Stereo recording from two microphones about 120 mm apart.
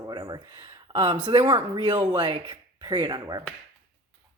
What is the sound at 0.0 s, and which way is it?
Speech, 35° right (ahead or behind).